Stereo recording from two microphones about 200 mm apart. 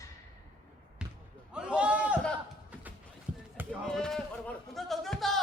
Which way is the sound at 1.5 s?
5° right (ahead or behind).